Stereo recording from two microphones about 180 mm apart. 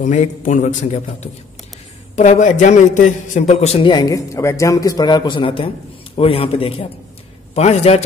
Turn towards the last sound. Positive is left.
turn(degrees=35)  # may be behind; listen again after turning